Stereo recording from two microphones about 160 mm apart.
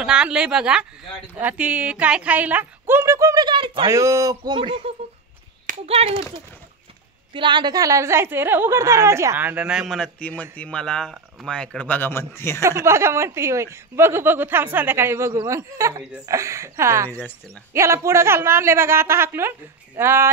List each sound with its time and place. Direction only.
0.0 s a woman's voice: 5° right (ahead or behind); by 3.9 s 30° right (ahead or behind)
3.9 s a sound: 20° right (ahead or behind)
4.6 s speech: 35° right (ahead or behind)
7.3 s a woman's voice: 30° right (ahead or behind); by 12.6 s 15° left (ahead or behind)
12.6 s speech: 15° right (ahead or behind)